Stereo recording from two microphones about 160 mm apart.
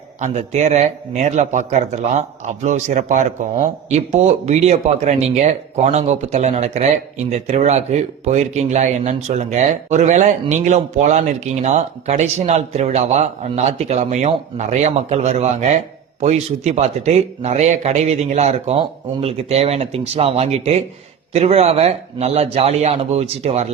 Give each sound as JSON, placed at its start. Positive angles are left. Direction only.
{"t": 0.2, "sound": "a man's voice", "side_deg": -45}